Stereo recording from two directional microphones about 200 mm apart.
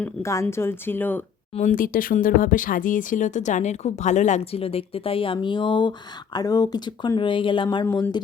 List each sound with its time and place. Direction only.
0.0 s speech: 15° left (ahead or behind)
1.5 s speech: 40° left (ahead or behind); by 8.2 s 20° left (ahead or behind)